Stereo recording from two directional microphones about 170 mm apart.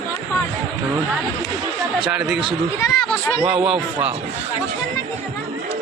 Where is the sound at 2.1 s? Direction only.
5° right (ahead or behind).